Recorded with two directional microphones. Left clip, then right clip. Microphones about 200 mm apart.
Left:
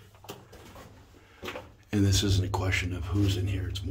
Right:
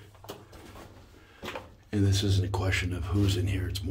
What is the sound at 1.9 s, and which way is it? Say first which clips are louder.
Speech: left 2 dB; 25° left (ahead or behind).